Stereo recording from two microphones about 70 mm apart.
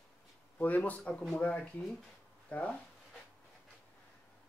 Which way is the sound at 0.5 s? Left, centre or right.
Left.